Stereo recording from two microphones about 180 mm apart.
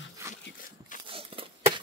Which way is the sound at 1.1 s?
30° right (ahead or behind).